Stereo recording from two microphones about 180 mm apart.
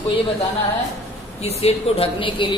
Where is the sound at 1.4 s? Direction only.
35° left (ahead or behind).